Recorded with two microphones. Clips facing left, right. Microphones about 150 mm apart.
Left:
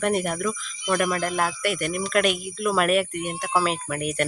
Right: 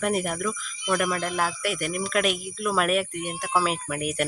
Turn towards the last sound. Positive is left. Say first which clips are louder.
# left 1 dB
turn(degrees=-5)  # may be behind; listen again after turning